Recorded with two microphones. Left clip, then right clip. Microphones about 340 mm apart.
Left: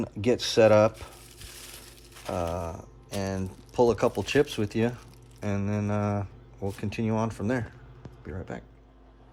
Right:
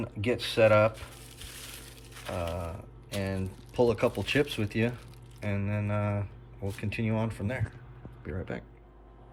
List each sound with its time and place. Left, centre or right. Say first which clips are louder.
0.0 s speech: left 4 dB; centre
1.5 s crushing: even; centre
2.1 s a sound: left 4 dB; centre
2.6 s speech: left 4 dB; centre